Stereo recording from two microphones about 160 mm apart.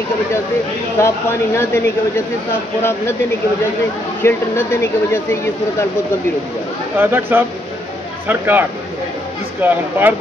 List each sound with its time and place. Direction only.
1.0 s speech: 15° left (ahead or behind)
4.2 s speech: 15° left (ahead or behind)
7.0 s speech: 15° right (ahead or behind)